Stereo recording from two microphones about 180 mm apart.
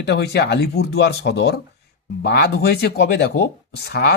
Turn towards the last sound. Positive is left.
turn(degrees=65)  # may be behind; listen again after turning